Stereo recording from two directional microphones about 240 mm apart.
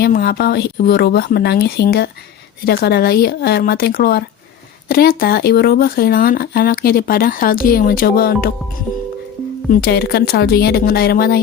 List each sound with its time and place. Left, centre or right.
0.0 s speech: left
9.6 s speech: left